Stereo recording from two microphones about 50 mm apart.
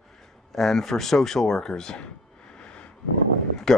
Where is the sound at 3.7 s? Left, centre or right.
Centre.